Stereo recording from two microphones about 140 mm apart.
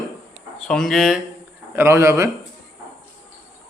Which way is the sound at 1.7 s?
20° right (ahead or behind).